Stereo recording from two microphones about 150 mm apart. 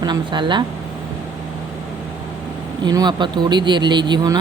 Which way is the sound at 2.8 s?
25° right (ahead or behind).